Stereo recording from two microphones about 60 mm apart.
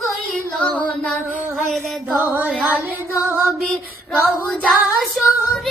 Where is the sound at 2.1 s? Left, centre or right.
Right.